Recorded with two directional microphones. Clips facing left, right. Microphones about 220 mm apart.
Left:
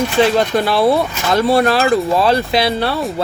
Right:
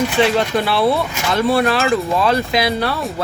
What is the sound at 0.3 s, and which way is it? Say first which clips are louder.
Speech: left 2 dB; 40° left (ahead or behind).